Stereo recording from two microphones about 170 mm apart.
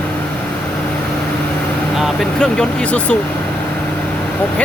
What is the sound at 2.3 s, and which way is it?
Speech, 5° left (ahead or behind).